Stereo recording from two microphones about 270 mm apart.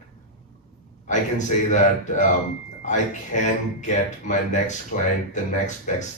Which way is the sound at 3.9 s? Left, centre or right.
Left.